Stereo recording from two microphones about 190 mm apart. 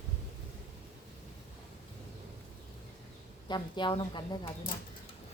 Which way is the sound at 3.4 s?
25° left (ahead or behind).